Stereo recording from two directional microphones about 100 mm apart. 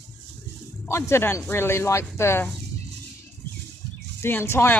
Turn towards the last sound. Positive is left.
turn(degrees=25)  # may be behind; listen again after turning